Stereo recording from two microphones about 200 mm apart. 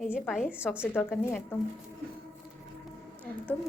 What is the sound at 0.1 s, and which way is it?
Speech, 5° right (ahead or behind).